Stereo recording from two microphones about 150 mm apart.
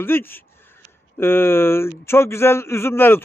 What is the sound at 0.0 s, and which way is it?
A man's voice, 15° left (ahead or behind).